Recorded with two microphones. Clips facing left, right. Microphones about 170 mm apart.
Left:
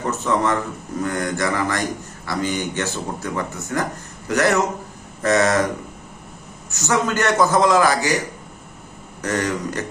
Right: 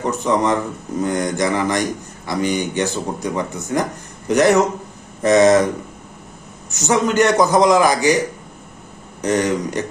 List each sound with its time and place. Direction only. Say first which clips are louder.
0.0 s a man's voice: right 3 dB; 15° right (ahead or behind)
6.7 s a man's voice: right 3 dB; 20° right (ahead or behind)
9.2 s speech: right 5 dB; 20° right (ahead or behind)